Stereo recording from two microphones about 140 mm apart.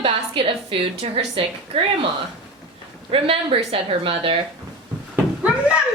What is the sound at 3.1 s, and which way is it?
A woman's voice, 40° right (ahead or behind).